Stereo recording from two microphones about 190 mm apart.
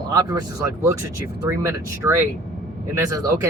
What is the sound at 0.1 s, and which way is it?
Speech, 20° right (ahead or behind).